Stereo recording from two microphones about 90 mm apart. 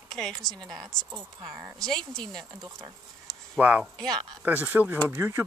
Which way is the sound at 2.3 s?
45° right (ahead or behind).